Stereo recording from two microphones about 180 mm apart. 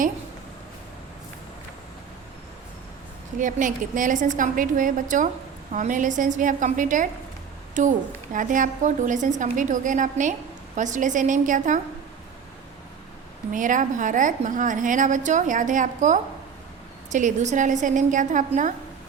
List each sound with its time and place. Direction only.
3.3 s a woman's voice: 45° right (ahead or behind)
13.5 s a woman's voice: 45° right (ahead or behind)